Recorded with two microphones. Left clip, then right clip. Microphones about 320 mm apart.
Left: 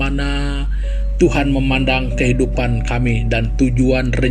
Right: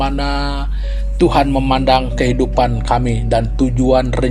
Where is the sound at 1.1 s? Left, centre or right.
Right.